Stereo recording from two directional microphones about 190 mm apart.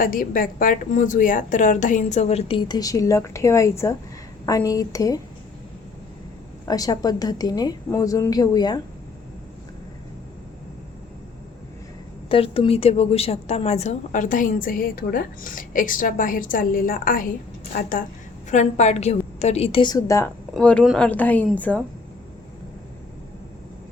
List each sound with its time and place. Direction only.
0.0 s a woman's voice: 45° left (ahead or behind); by 5.2 s 20° left (ahead or behind)
6.7 s a woman's voice: 20° left (ahead or behind)
12.3 s a woman's voice: 30° left (ahead or behind)
20.5 s speech: 5° left (ahead or behind)